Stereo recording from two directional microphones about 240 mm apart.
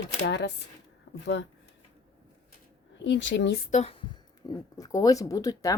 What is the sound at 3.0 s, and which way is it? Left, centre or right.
Speech, left.